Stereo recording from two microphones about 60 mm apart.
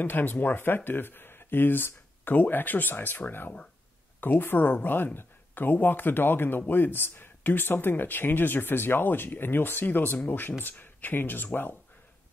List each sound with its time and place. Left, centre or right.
0.0 s speech: left